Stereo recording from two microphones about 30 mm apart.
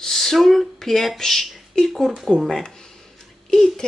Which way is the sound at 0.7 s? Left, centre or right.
Centre.